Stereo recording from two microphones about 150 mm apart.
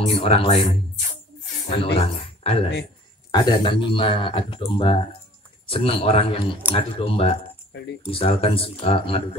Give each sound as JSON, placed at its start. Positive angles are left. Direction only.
{"t": 0.1, "sound": "speech", "side_deg": 40}
{"t": 2.0, "sound": "speech", "side_deg": 40}
{"t": 3.3, "sound": "speech", "side_deg": 25}